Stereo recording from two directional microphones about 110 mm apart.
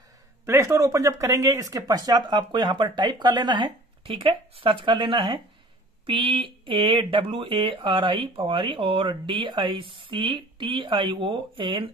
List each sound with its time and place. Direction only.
0.5 s speech: 25° right (ahead or behind); by 11.9 s 50° right (ahead or behind)